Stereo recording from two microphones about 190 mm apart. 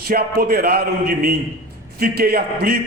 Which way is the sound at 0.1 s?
50° right (ahead or behind).